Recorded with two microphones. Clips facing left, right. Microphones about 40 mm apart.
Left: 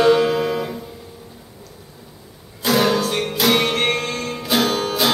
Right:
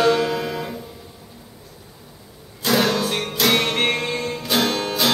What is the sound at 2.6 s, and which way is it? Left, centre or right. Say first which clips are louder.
Music: left 2 dB; centre.